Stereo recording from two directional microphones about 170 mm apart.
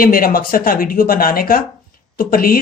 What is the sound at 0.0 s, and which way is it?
Speech, 60° left (ahead or behind).